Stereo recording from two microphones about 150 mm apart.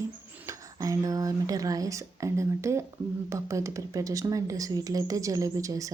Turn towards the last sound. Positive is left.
turn(degrees=-20)  # may be behind; listen again after turning